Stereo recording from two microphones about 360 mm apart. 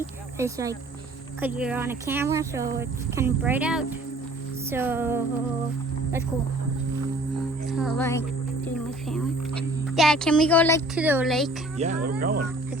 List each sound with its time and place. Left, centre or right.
0.3 s speech: centre
7.7 s music: centre
9.9 s speech: centre
11.0 s speech: centre
11.8 s speech: right